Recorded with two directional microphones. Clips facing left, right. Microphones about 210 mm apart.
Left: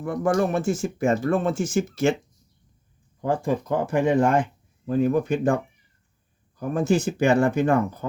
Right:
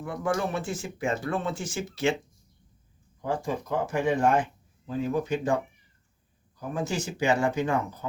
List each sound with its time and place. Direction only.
0.0 s speech: 45° left (ahead or behind)
3.2 s speech: 55° left (ahead or behind)
6.6 s speech: 55° left (ahead or behind)